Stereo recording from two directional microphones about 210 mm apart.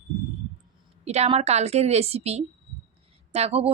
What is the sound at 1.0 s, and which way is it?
Speech, 30° right (ahead or behind).